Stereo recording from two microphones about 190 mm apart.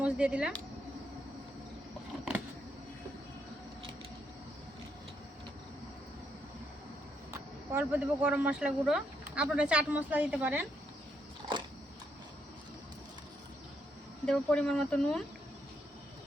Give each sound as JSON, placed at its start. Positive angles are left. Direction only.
{"t": 0.0, "sound": "speech", "side_deg": -5}
{"t": 7.7, "sound": "speech", "side_deg": -10}
{"t": 11.4, "sound": "a sound", "side_deg": -20}
{"t": 14.3, "sound": "speech", "side_deg": 5}